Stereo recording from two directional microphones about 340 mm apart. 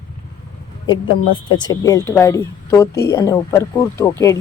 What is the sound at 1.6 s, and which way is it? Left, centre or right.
Speech, centre.